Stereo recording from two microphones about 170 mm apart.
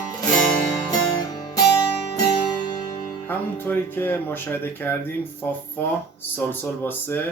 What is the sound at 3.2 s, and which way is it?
Speech, 10° left (ahead or behind).